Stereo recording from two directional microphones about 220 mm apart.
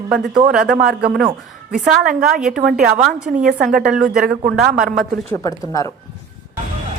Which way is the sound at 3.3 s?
40° right (ahead or behind).